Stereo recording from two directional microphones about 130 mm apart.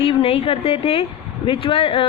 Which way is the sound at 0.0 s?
45° left (ahead or behind).